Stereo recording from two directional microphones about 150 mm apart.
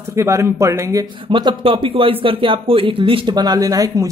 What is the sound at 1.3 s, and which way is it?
Speech, 30° right (ahead or behind).